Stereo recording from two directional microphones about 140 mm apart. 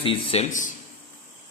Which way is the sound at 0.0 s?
40° left (ahead or behind).